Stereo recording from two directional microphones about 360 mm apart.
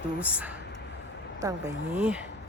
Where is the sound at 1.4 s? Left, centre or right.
Centre.